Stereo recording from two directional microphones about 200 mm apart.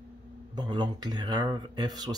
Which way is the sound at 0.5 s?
20° right (ahead or behind).